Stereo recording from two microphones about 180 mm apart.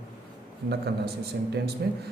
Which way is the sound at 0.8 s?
65° right (ahead or behind).